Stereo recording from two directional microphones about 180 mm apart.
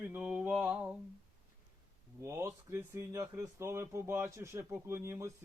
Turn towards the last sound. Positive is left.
turn(degrees=-15)  # may be behind; listen again after turning